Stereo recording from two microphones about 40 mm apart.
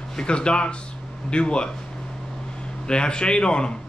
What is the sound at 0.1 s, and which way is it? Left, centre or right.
A man's voice, left.